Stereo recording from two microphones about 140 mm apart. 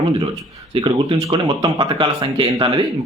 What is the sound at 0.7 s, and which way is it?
A man's voice, 40° right (ahead or behind).